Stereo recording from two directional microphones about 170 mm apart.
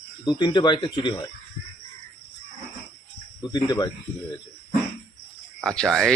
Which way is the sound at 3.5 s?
25° left (ahead or behind).